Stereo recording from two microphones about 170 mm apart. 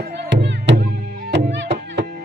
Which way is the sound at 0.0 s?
75° right (ahead or behind).